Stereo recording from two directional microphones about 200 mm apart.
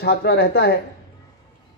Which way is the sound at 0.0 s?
55° left (ahead or behind).